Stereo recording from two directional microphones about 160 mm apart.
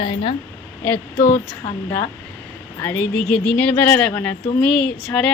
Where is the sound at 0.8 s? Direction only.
15° left (ahead or behind).